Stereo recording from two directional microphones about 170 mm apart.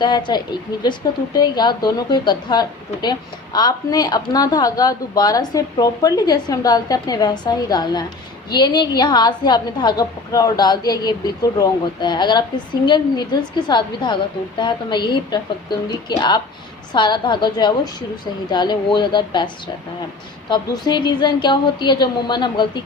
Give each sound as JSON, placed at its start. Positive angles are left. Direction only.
{"t": 0.0, "sound": "a woman's voice", "side_deg": 25}